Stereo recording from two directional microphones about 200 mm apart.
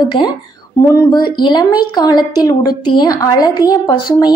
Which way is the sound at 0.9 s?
20° left (ahead or behind).